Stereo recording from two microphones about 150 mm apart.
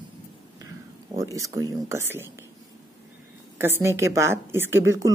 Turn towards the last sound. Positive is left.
turn(degrees=-20)  # may be behind; listen again after turning